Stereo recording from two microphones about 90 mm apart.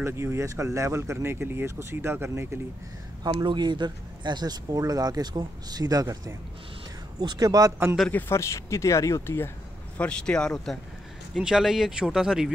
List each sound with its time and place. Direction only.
0.0 s speech: 30° right (ahead or behind)
3.3 s speech: 55° right (ahead or behind)
8.1 s speech: 20° left (ahead or behind)
8.4 s speech: 30° left (ahead or behind)
9.9 s speech: 10° left (ahead or behind); by 12.4 s 5° right (ahead or behind)